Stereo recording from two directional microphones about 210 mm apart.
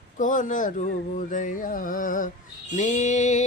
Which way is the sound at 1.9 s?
40° left (ahead or behind).